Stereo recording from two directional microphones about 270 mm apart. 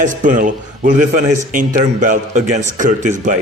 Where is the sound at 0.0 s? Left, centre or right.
Right.